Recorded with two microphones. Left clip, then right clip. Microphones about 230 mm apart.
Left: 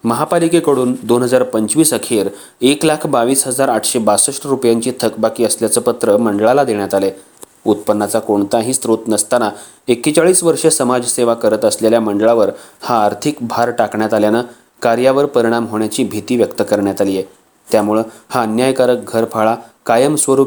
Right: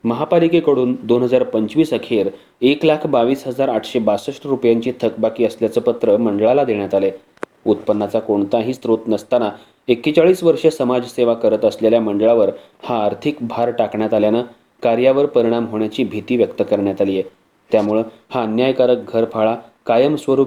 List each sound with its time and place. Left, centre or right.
0.0 s speech: left